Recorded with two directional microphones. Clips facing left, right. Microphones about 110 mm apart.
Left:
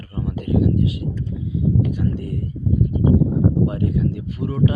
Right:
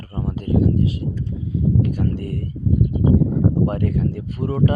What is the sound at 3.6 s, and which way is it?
A man's voice, 55° right (ahead or behind).